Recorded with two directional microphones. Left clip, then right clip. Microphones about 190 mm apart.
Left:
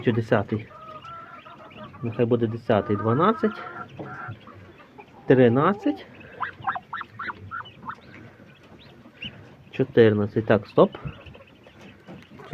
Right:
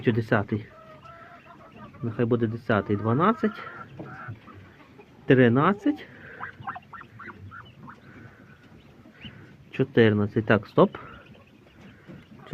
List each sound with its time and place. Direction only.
0.0 s speech: 10° left (ahead or behind)
2.1 s speech: 10° left (ahead or behind)
5.2 s speech: 10° left (ahead or behind)
6.4 s a sound: 55° left (ahead or behind)
9.7 s speech: 10° left (ahead or behind)